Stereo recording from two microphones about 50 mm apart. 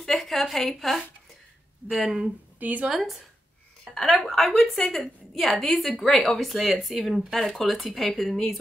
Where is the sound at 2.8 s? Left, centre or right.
Centre.